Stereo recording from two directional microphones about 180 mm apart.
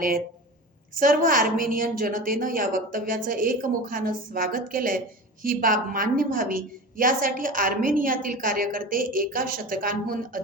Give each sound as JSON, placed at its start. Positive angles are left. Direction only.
{"t": 0.9, "sound": "a woman's voice", "side_deg": -50}